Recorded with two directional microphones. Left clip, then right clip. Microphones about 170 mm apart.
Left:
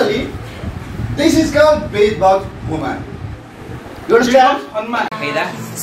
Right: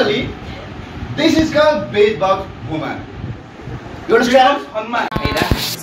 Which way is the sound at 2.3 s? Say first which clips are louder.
Left 4 dB; centre (ahead or behind).